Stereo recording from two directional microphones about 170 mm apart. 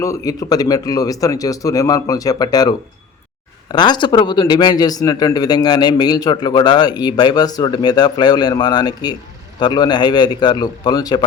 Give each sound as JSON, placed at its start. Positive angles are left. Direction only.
{"t": 0.0, "sound": "speech", "side_deg": 20}